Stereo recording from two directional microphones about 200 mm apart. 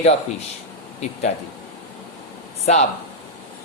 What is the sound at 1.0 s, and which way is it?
Speech, 35° left (ahead or behind).